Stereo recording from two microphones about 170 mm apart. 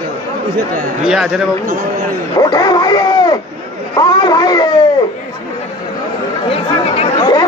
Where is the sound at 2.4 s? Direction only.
25° left (ahead or behind).